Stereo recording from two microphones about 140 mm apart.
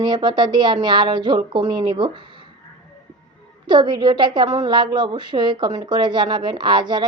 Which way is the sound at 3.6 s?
35° right (ahead or behind).